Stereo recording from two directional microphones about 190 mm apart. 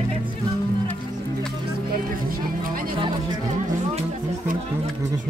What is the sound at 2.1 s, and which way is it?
Music, 50° right (ahead or behind).